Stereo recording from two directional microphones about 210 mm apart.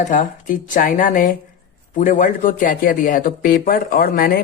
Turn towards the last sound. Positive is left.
turn(degrees=45)  # may be behind; listen again after turning